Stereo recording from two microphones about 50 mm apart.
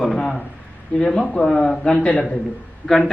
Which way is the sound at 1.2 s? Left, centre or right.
Left.